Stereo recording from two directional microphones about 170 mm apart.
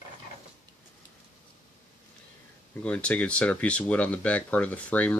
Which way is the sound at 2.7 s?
5° left (ahead or behind).